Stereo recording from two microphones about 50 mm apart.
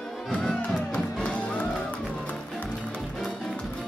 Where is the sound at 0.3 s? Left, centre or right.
Centre.